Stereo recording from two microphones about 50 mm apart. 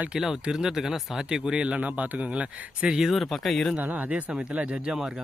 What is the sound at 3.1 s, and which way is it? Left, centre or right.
Speech, centre.